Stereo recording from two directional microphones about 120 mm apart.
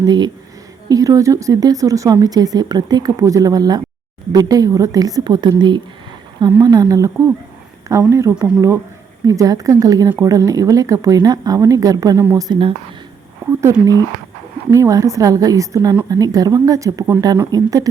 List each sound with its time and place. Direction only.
0.0 s speech: 35° right (ahead or behind)
12.4 s speech: 40° right (ahead or behind)
13.5 s speech: 20° right (ahead or behind)